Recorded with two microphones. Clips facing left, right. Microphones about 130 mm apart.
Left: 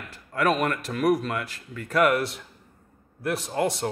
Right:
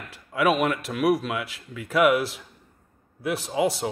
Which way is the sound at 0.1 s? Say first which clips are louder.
Right 2 dB; 5° right (ahead or behind).